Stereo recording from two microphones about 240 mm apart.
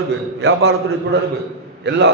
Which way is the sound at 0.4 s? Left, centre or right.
Right.